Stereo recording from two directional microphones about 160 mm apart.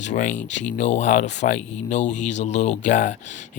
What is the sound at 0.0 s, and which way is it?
Speech, 50° left (ahead or behind).